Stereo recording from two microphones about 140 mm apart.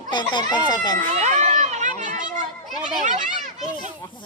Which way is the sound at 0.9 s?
55° right (ahead or behind).